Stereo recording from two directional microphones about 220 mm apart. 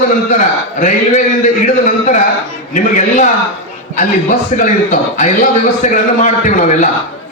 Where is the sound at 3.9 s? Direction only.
35° left (ahead or behind).